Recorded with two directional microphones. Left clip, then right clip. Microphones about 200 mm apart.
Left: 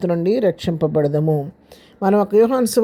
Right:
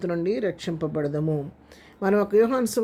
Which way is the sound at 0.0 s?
30° left (ahead or behind).